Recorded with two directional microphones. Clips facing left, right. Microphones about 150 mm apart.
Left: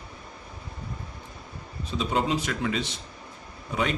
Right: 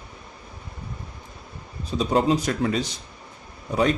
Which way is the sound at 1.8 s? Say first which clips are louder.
Right 6 dB; 40° right (ahead or behind).